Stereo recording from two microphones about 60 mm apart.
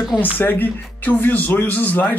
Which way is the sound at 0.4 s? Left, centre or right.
Left.